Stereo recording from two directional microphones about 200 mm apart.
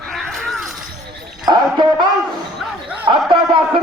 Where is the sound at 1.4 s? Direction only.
20° right (ahead or behind).